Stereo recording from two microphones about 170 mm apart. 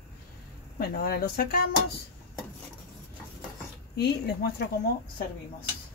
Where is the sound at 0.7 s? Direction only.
65° left (ahead or behind).